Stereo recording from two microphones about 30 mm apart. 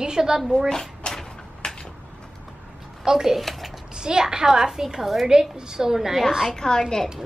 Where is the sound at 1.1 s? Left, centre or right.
Centre.